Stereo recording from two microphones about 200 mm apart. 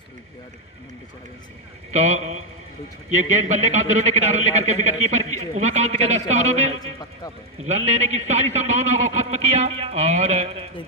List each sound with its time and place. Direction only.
1.9 s a man's voice: 35° right (ahead or behind)